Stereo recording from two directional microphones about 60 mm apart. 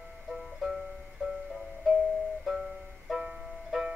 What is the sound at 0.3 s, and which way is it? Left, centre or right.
Music, centre.